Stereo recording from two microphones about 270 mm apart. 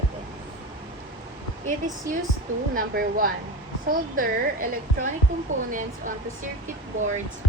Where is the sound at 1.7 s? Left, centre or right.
Right.